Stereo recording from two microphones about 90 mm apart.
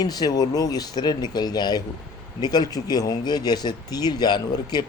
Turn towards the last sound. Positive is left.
turn(degrees=50)  # may be behind; listen again after turning